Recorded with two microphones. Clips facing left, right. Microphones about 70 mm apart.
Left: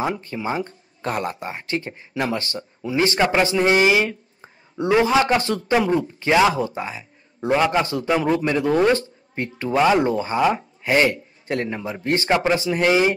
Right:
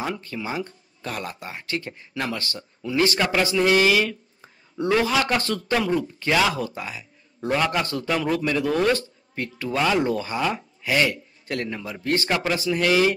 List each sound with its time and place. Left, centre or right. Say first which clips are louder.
0.0 s a man's voice: left 5 dB; left